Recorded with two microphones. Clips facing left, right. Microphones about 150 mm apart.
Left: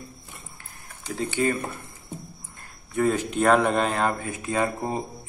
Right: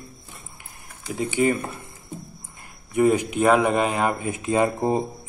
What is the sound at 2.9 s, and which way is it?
Speech, 15° right (ahead or behind).